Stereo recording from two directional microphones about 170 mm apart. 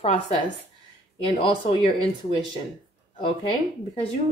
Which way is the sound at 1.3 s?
40° left (ahead or behind).